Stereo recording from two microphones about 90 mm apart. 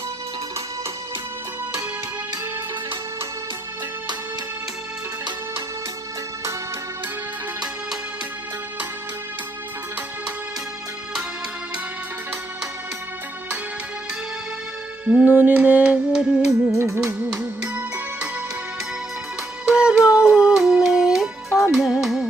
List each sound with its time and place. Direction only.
15.0 s music: 15° right (ahead or behind)
16.7 s music: 30° right (ahead or behind)
17.0 s music: 10° right (ahead or behind)
19.6 s music: 10° right (ahead or behind)